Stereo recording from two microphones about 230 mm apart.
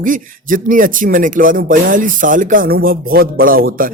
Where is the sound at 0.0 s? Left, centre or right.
Right.